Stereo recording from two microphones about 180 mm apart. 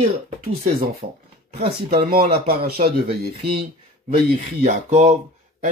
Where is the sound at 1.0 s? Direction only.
50° right (ahead or behind).